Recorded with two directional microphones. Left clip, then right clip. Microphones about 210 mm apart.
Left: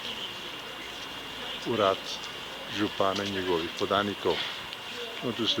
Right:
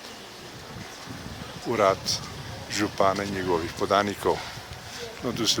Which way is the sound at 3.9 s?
40° right (ahead or behind).